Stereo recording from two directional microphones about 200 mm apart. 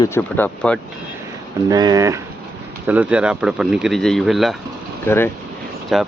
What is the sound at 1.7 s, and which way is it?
Speech, 20° right (ahead or behind).